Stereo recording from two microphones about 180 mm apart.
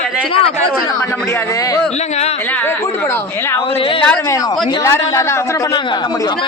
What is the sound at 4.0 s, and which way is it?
A woman's voice, 5° left (ahead or behind).